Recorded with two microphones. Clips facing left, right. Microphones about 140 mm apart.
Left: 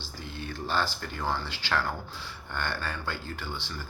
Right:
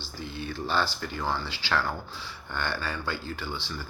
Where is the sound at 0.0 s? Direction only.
50° left (ahead or behind).